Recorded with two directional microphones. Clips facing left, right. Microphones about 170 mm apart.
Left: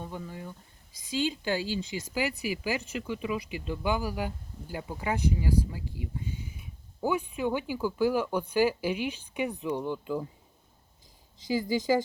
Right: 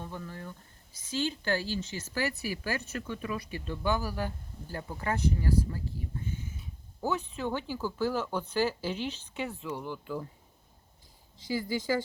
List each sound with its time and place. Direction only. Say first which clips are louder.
0.0 s speech: left 2 dB; 15° left (ahead or behind)
11.3 s speech: left 4 dB; 15° left (ahead or behind)